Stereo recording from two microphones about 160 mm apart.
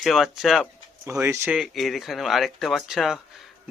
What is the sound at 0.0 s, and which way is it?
Speech, centre (ahead or behind).